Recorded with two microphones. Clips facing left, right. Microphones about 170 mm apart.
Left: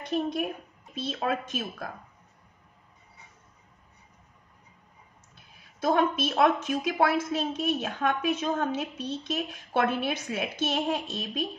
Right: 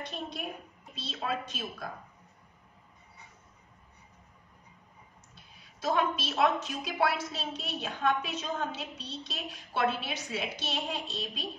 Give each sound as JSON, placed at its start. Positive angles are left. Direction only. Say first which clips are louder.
{"t": 0.9, "sound": "a woman's voice", "louder": "left 5 dB", "side_deg": 55}
{"t": 5.8, "sound": "a woman's voice", "louder": "left 5 dB", "side_deg": 55}